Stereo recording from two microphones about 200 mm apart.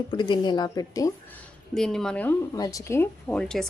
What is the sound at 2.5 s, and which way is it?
Speech, 20° left (ahead or behind).